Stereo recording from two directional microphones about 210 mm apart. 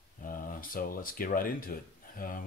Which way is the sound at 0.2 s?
40° left (ahead or behind).